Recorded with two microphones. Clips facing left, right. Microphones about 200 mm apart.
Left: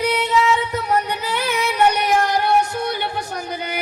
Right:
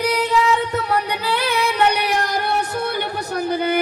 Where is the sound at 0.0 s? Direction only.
35° right (ahead or behind).